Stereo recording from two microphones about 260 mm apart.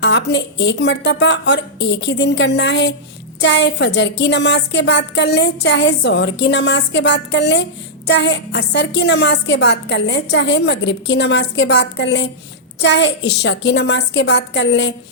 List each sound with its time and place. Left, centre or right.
0.0 s a woman's voice: left